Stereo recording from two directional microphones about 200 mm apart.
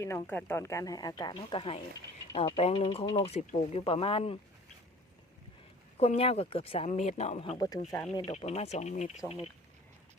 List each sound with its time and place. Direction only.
0.0 s speech: 15° left (ahead or behind); by 4.4 s 30° left (ahead or behind)
6.0 s speech: 30° left (ahead or behind)